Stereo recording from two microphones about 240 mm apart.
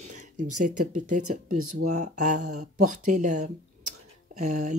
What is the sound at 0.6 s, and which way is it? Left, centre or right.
Speech, right.